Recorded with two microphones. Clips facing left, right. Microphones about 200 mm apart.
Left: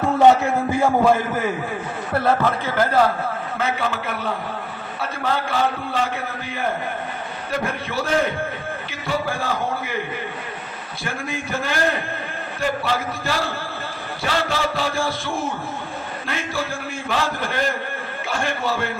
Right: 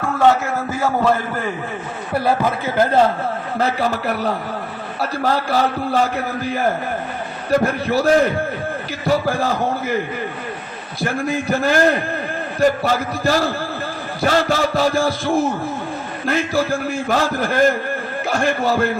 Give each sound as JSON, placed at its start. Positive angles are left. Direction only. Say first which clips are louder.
{"t": 0.0, "sound": "a man's voice", "louder": "left 1 dB", "side_deg": 20}
{"t": 2.4, "sound": "speech", "louder": "right 2 dB", "side_deg": -20}
{"t": 3.6, "sound": "a man's voice", "louder": "right 5 dB", "side_deg": -40}
{"t": 9.0, "sound": "a man's voice", "louder": "right 6 dB", "side_deg": -40}
{"t": 11.0, "sound": "a man's voice", "louder": "right 8 dB", "side_deg": -40}